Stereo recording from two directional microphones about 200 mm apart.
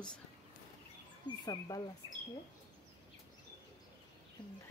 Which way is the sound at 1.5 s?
20° left (ahead or behind).